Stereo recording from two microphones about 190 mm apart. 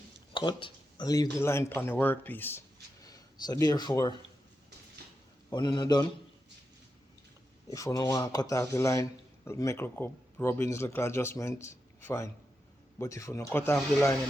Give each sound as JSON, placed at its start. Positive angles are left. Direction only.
{"t": 0.3, "sound": "speech", "side_deg": 25}
{"t": 5.5, "sound": "a man's voice", "side_deg": 20}
{"t": 7.7, "sound": "speech", "side_deg": 15}